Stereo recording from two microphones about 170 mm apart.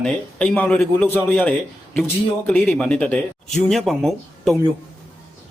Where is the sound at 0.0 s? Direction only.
5° left (ahead or behind).